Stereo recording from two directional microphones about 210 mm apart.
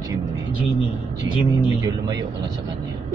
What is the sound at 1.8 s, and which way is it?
Speech, 15° right (ahead or behind).